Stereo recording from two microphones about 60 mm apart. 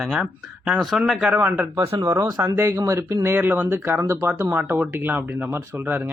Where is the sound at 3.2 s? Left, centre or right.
Right.